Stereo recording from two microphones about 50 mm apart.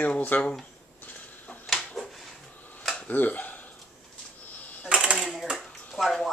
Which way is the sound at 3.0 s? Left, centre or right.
Left.